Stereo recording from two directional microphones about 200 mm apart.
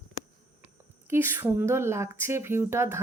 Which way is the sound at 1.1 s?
10° right (ahead or behind).